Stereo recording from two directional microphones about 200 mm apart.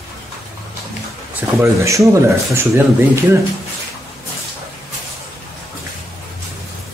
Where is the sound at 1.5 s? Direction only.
15° right (ahead or behind).